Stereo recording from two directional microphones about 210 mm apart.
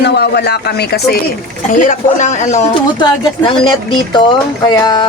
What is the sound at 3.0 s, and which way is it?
Speech, 20° left (ahead or behind).